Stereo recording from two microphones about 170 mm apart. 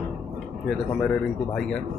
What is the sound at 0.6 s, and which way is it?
Speech, 5° left (ahead or behind).